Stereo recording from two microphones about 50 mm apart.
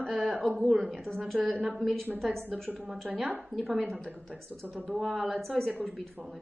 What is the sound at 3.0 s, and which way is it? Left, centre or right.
A man's voice, centre.